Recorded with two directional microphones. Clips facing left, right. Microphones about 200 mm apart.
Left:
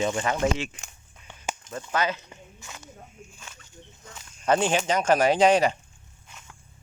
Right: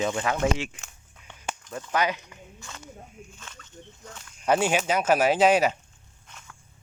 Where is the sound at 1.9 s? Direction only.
15° right (ahead or behind).